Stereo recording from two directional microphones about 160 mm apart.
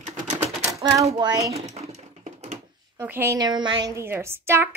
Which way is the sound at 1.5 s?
40° right (ahead or behind).